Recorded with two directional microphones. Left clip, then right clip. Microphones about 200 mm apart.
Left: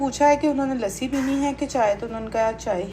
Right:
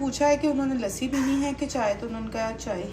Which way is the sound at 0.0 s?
5° right (ahead or behind).